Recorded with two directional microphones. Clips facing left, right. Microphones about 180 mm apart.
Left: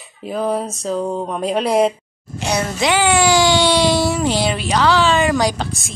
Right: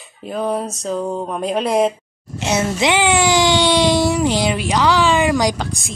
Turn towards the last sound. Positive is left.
turn(degrees=-15)  # may be behind; listen again after turning